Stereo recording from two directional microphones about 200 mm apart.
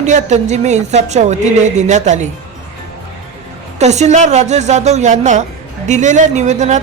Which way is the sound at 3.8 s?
35° right (ahead or behind).